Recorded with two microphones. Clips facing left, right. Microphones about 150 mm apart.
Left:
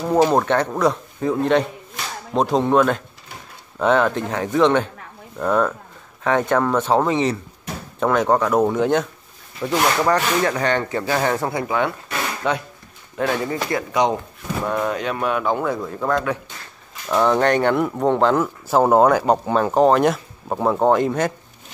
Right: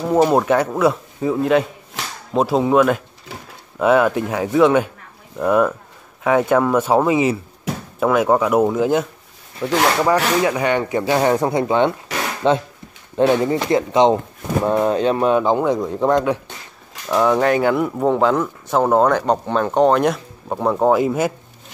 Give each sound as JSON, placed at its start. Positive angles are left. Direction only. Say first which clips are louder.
{"t": 0.1, "sound": "speech", "louder": "right 2 dB", "side_deg": -5}
{"t": 10.0, "sound": "speech", "louder": "right 2 dB", "side_deg": -10}
{"t": 15.5, "sound": "speech", "louder": "right 5 dB", "side_deg": -15}
{"t": 17.1, "sound": "speech", "louder": "right 1 dB", "side_deg": -5}